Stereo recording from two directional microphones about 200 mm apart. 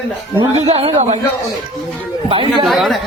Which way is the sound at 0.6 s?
30° right (ahead or behind).